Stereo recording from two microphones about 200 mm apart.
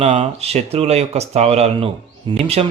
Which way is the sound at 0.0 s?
35° right (ahead or behind).